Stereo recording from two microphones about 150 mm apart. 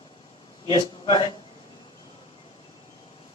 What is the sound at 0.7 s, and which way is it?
Speech, 30° left (ahead or behind).